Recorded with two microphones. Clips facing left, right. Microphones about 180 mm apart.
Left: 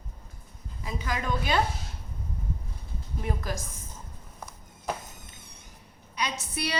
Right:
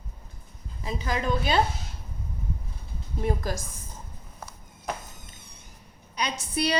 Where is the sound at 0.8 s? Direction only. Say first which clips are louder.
Right 3 dB; 25° right (ahead or behind).